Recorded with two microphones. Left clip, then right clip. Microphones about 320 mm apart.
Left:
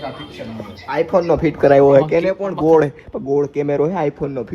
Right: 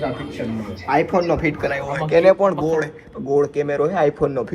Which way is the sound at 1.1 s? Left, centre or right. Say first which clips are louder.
Left 3 dB; centre.